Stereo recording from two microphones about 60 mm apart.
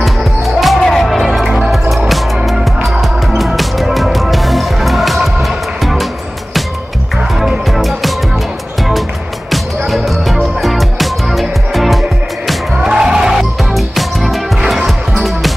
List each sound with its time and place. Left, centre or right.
0.0 s music: centre
7.3 s music: centre
9.5 s music: centre
12.7 s music: centre